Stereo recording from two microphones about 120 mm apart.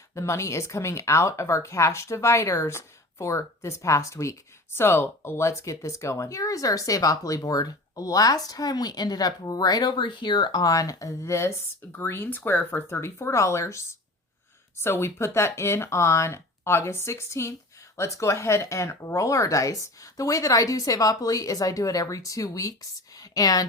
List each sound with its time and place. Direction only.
0.1 s speech: 25° left (ahead or behind)